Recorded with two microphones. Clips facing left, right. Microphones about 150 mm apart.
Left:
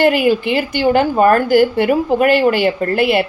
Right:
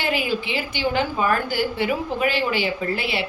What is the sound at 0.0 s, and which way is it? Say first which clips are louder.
A woman's voice: left 11 dB; 55° left (ahead or behind).